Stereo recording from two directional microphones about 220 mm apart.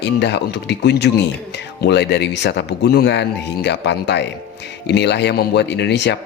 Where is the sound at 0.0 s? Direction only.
50° left (ahead or behind).